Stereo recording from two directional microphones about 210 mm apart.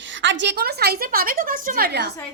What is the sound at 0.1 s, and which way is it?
A woman's voice, 60° right (ahead or behind).